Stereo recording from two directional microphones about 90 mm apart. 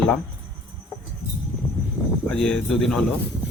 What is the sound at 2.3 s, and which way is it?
Speech, 5° left (ahead or behind).